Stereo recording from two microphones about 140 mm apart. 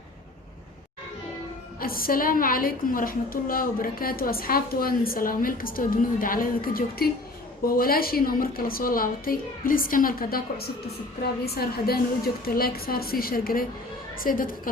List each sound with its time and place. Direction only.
1.8 s a woman's voice: 90° left